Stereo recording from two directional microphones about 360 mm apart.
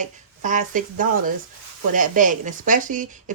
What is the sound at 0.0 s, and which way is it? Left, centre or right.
Speech, right.